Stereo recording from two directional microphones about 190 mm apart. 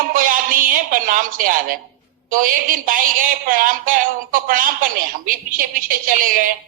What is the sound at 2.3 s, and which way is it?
A man's voice, 45° right (ahead or behind).